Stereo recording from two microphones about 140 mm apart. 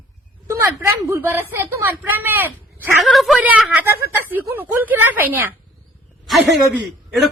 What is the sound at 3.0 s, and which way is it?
Speech, centre (ahead or behind).